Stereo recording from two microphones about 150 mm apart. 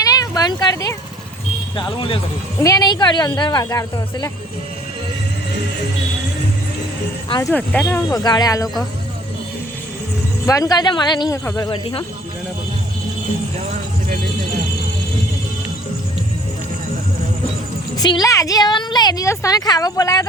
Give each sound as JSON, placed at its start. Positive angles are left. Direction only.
{"t": 0.0, "sound": "a sound", "side_deg": 25}
{"t": 1.7, "sound": "speech", "side_deg": 35}
{"t": 2.6, "sound": "a woman's voice", "side_deg": 25}
{"t": 7.3, "sound": "a woman's voice", "side_deg": 25}
{"t": 7.5, "sound": "speech", "side_deg": 10}
{"t": 8.1, "sound": "a woman's voice", "side_deg": 25}
{"t": 10.4, "sound": "a woman's voice", "side_deg": 20}
{"t": 11.7, "sound": "speech", "side_deg": 35}
{"t": 17.9, "sound": "a woman's voice", "side_deg": 25}